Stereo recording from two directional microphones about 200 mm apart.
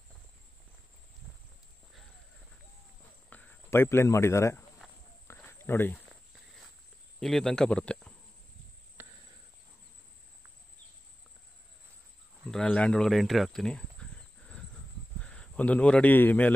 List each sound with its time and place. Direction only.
1.3 s walk: centre (ahead or behind)
3.3 s speech: 10° left (ahead or behind)
5.3 s walk: 15° left (ahead or behind)
7.2 s speech: centre (ahead or behind)
9.0 s cricket: 10° right (ahead or behind)
12.4 s speech: 5° left (ahead or behind)
15.1 s speech: 5° left (ahead or behind)